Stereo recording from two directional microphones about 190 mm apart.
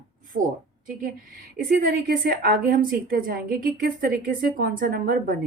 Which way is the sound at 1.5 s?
50° right (ahead or behind).